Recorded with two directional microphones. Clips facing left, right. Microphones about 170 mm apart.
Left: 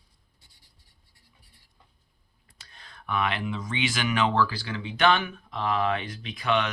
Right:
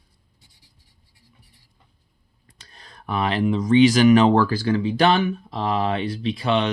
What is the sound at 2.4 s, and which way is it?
Speech, 35° right (ahead or behind).